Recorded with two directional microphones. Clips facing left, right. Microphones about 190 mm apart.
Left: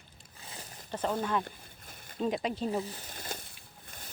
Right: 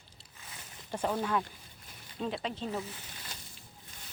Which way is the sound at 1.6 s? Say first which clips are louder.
Left 2 dB; 50° left (ahead or behind).